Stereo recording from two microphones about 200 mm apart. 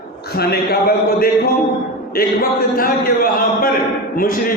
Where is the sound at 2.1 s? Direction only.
45° left (ahead or behind).